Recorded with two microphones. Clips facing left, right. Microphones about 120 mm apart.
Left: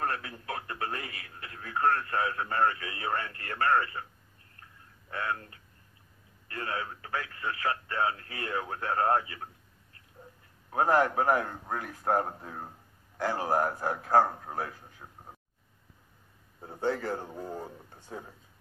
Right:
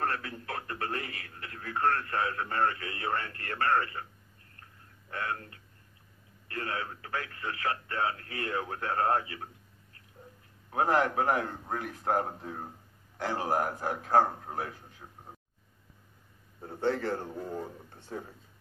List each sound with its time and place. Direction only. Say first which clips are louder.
0.0 s radio: even; 40° right (ahead or behind)
1.8 s a man's voice: left 1 dB; 35° left (ahead or behind)
2.6 s speech: left 2 dB; 40° right (ahead or behind)
3.4 s a man's voice: left 2 dB; 35° left (ahead or behind)
5.2 s speech: left 2 dB; 40° right (ahead or behind)
6.5 s a man's voice: even; 35° left (ahead or behind)
10.7 s a man's voice: left 2 dB; 35° left (ahead or behind)
16.8 s a man's voice: right 1 dB; 35° left (ahead or behind)